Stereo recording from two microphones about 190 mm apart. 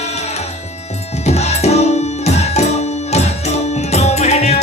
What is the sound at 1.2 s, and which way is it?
Music, 35° left (ahead or behind).